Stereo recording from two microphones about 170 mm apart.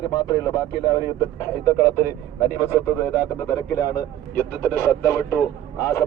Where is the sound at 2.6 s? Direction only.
15° left (ahead or behind).